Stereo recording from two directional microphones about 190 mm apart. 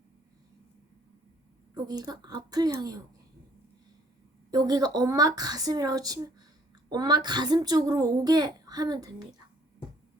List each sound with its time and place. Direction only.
1.7 s a child's voice: 20° right (ahead or behind)
4.5 s a child's voice: 20° right (ahead or behind)